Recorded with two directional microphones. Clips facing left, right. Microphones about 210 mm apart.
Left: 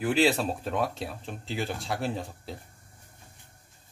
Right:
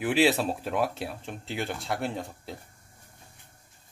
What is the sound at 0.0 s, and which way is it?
Speech, 5° right (ahead or behind).